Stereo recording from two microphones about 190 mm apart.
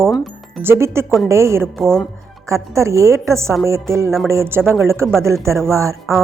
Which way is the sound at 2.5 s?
15° right (ahead or behind).